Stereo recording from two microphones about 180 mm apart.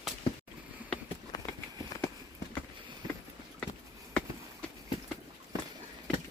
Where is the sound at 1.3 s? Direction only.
20° left (ahead or behind).